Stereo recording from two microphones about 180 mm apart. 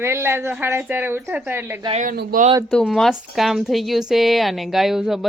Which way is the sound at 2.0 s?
50° right (ahead or behind).